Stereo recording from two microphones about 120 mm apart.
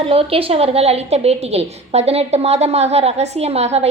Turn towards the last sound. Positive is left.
turn(degrees=-65)  # may be behind; listen again after turning